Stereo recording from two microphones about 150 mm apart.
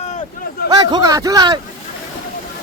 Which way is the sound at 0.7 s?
25° right (ahead or behind).